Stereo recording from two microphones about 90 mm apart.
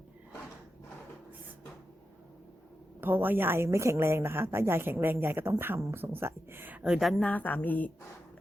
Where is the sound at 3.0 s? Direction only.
25° right (ahead or behind).